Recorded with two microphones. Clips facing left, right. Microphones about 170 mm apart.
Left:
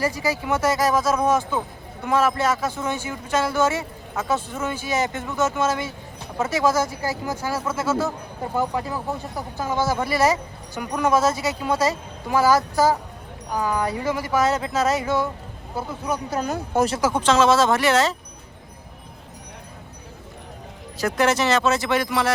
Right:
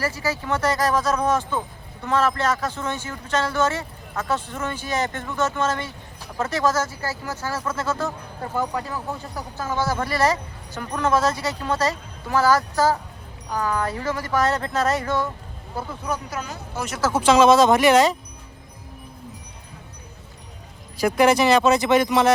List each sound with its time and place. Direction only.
0.0 s speech: 15° left (ahead or behind)
16.7 s speech: 55° left (ahead or behind)
17.1 s speech: 10° right (ahead or behind)
21.0 s speech: 10° right (ahead or behind)